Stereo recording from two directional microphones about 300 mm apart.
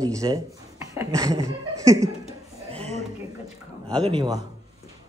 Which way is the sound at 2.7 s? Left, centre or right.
Right.